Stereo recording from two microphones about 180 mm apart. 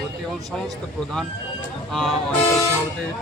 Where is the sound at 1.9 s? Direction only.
Centre (ahead or behind).